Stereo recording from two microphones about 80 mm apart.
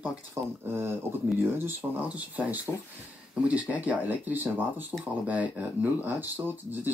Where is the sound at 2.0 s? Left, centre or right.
Centre.